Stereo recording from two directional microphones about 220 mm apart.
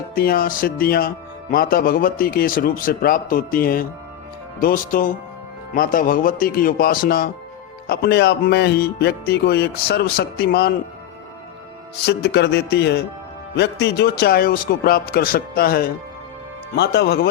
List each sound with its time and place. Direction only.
0.1 s speech: 40° left (ahead or behind)
12.0 s speech: 50° left (ahead or behind)